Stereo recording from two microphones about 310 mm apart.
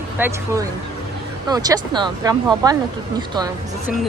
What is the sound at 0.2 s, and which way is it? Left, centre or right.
Speech, centre.